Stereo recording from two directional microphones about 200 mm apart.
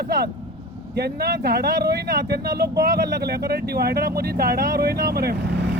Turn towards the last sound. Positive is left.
turn(degrees=-55)  # may be behind; listen again after turning